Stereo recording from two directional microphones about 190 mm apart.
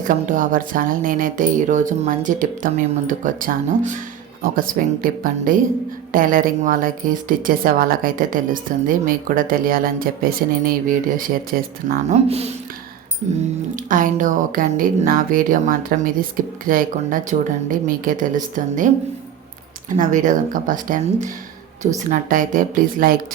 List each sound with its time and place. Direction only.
0.0 s speech: 45° right (ahead or behind)
12.1 s speech: 35° right (ahead or behind)
13.9 s speech: 45° right (ahead or behind)
20.0 s speech: 40° right (ahead or behind)